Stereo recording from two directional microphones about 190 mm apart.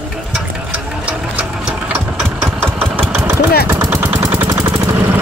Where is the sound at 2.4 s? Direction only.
10° right (ahead or behind).